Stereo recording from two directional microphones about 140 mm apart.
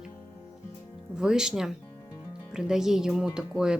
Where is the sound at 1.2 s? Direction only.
5° right (ahead or behind).